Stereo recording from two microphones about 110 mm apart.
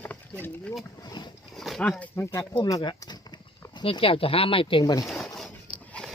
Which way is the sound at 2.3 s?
35° left (ahead or behind).